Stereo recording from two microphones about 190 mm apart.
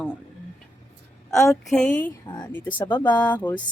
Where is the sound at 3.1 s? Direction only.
10° left (ahead or behind).